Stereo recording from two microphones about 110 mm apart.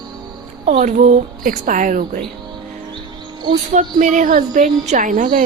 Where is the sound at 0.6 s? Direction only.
90° right.